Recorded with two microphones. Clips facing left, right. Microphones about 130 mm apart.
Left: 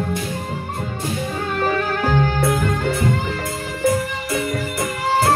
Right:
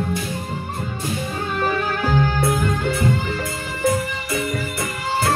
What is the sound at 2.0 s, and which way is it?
Music, 70° left (ahead or behind).